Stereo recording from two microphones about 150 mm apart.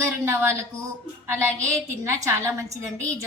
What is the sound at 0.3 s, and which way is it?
A woman's voice, 15° right (ahead or behind).